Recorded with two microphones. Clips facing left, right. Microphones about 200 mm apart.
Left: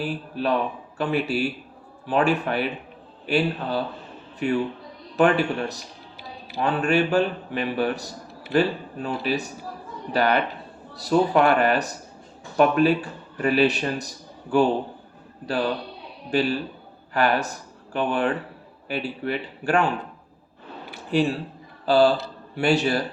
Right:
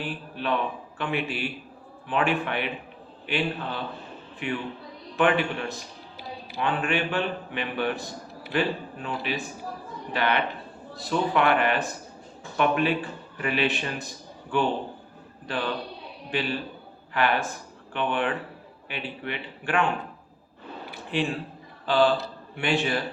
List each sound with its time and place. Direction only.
0.0 s speech: 40° left (ahead or behind)
16.3 s a woman's voice: 40° left (ahead or behind)
21.1 s a man's voice: 40° left (ahead or behind)